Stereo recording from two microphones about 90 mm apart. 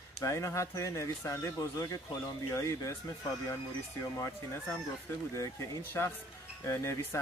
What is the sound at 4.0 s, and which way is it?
A man's voice, 35° left (ahead or behind).